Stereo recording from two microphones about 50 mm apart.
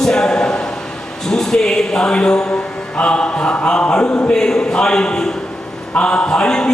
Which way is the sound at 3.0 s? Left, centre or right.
Centre.